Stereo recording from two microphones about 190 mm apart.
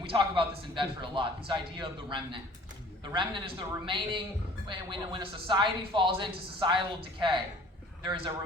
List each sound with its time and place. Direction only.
0.0 s a man's voice: 25° right (ahead or behind)